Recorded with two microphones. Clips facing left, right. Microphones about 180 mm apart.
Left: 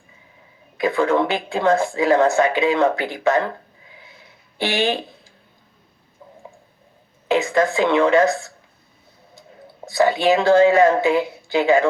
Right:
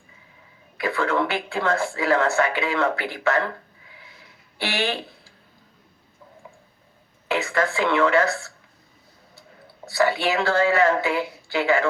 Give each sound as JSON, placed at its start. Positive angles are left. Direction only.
{"t": 0.8, "sound": "speech", "side_deg": 20}
{"t": 4.5, "sound": "speech", "side_deg": 20}
{"t": 7.3, "sound": "speech", "side_deg": 20}
{"t": 9.8, "sound": "speech", "side_deg": 20}